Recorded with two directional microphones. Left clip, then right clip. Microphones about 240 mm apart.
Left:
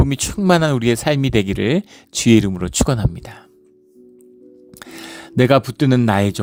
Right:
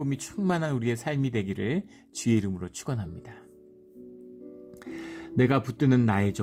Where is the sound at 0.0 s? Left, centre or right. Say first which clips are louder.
Left 12 dB; left.